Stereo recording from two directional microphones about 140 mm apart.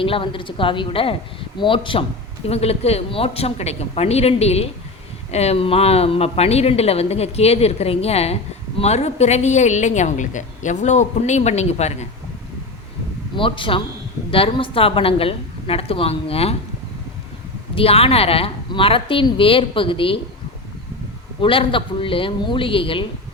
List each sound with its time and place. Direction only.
0.0 s a woman's voice: 40° left (ahead or behind)
13.3 s a woman's voice: 35° left (ahead or behind)
17.7 s a woman's voice: 45° left (ahead or behind)
21.4 s a woman's voice: 40° left (ahead or behind)